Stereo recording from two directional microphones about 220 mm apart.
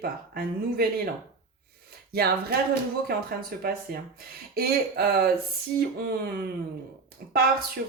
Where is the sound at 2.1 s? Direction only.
45° right (ahead or behind).